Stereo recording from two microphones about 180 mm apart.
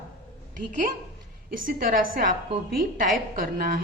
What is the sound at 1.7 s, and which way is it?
Speech, 50° right (ahead or behind).